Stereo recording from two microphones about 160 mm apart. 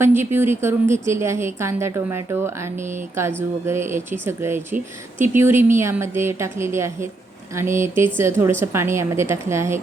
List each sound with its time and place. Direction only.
0.0 s a woman's voice: 15° right (ahead or behind)
3.7 s a woman's voice: 15° right (ahead or behind)